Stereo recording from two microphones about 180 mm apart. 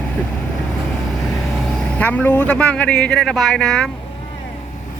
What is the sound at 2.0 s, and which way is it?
Speech, 10° left (ahead or behind).